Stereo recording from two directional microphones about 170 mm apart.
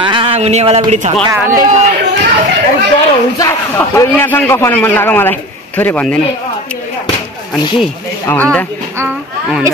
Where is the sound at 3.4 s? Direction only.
15° left (ahead or behind).